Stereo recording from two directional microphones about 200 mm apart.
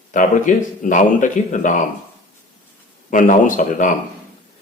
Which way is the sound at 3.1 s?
40° left (ahead or behind).